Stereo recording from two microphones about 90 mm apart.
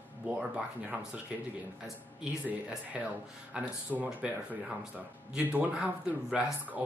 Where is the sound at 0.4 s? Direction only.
10° right (ahead or behind).